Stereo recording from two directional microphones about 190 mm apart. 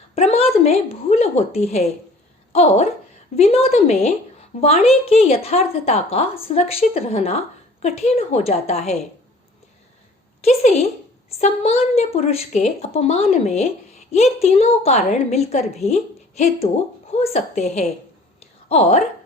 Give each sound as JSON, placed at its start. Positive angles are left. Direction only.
{"t": 0.2, "sound": "a woman's voice", "side_deg": 30}
{"t": 10.4, "sound": "a woman's voice", "side_deg": 35}
{"t": 18.3, "sound": "a sound", "side_deg": 35}